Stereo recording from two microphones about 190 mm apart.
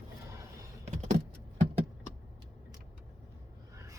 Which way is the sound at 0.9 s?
35° right (ahead or behind).